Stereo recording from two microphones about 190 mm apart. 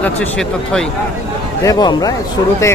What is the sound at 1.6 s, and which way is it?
Speech, 20° left (ahead or behind).